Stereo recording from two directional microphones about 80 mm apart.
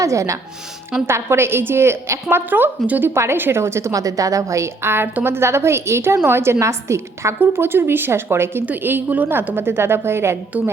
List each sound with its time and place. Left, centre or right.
0.0 s a woman's voice: right
1.0 s a woman's voice: right